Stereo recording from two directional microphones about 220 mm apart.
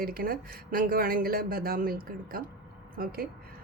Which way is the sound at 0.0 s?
40° right (ahead or behind).